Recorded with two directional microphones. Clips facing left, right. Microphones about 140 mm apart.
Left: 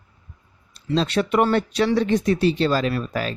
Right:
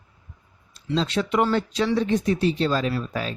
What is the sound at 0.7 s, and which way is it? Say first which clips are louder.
Speech: left 3 dB; 65° left (ahead or behind).